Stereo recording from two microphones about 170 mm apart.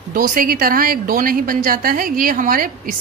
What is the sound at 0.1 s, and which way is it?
A woman's voice, 55° right (ahead or behind).